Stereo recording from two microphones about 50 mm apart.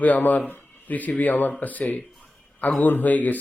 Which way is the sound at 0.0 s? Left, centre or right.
Left.